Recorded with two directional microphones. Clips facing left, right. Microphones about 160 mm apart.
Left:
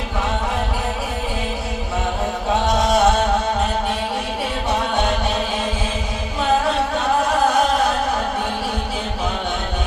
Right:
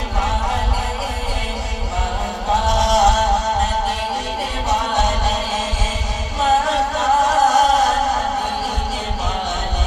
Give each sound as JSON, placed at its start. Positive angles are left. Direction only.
{"t": 2.6, "sound": "music", "side_deg": -40}